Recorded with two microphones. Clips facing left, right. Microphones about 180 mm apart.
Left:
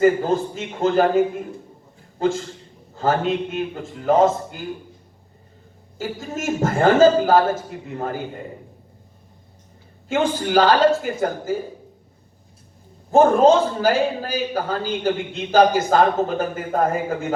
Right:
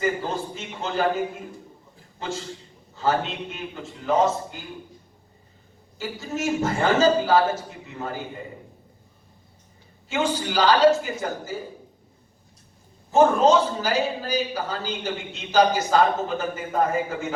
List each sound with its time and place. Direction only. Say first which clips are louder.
0.0 s a man's voice: left 9 dB; 50° left (ahead or behind)
6.0 s a man's voice: left 1 dB; 50° left (ahead or behind)
10.1 s a man's voice: left 5 dB; 50° left (ahead or behind)
13.1 s a man's voice: left 4 dB; 50° left (ahead or behind)